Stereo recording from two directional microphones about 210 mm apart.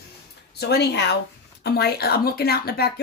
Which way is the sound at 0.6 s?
50° left (ahead or behind).